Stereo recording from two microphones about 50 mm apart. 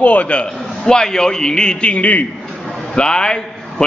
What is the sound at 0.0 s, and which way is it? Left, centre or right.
A man's voice, left.